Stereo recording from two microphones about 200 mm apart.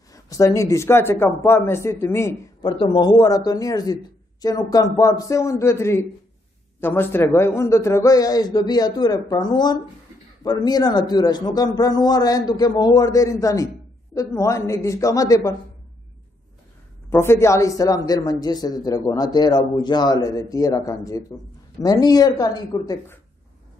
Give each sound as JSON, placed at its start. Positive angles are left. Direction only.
{"t": 0.1, "sound": "a man's voice", "side_deg": 15}
{"t": 17.1, "sound": "a man's voice", "side_deg": 10}